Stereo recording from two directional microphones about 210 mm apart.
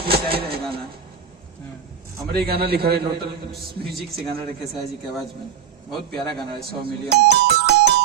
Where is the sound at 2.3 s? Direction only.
45° right (ahead or behind).